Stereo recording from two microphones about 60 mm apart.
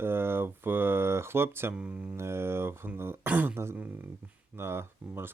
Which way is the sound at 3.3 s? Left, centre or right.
Right.